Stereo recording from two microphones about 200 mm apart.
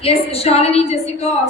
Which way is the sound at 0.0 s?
30° left (ahead or behind).